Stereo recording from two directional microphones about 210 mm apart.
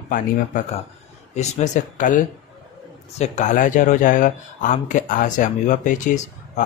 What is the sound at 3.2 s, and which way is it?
Speech, 35° left (ahead or behind).